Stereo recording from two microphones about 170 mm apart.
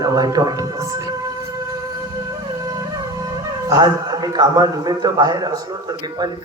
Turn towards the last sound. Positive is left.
turn(degrees=-25)  # may be behind; listen again after turning